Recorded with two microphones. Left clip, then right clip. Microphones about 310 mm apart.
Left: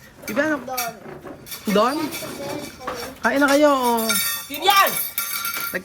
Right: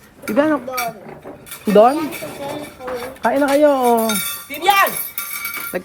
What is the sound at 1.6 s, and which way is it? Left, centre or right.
Speech, centre.